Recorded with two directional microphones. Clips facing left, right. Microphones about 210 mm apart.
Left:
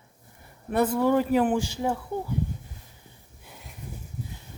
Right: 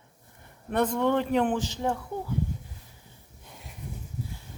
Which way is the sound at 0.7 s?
5° left (ahead or behind).